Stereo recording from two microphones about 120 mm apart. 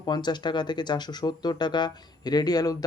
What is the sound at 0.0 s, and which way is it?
Speech, 35° left (ahead or behind).